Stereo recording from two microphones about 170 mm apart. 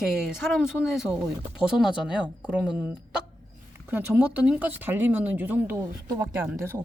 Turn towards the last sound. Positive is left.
turn(degrees=-15)  # may be behind; listen again after turning